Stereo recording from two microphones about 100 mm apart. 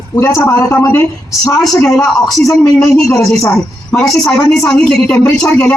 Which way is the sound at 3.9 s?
5° left (ahead or behind).